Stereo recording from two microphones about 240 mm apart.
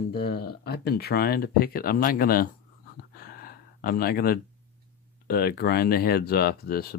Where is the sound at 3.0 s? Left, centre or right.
Left.